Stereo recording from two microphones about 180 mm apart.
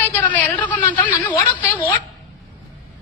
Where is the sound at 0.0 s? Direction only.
10° left (ahead or behind).